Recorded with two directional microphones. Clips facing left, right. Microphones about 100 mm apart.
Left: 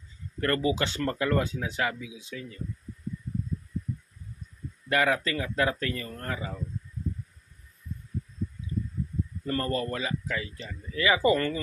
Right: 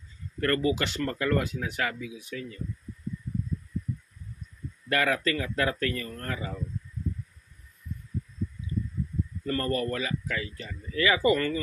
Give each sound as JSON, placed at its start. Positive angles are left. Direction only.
{"t": 0.4, "sound": "speech", "side_deg": 25}
{"t": 4.8, "sound": "speech", "side_deg": 20}
{"t": 9.5, "sound": "speech", "side_deg": 25}